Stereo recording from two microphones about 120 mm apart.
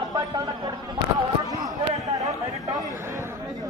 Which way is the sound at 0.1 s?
35° right (ahead or behind).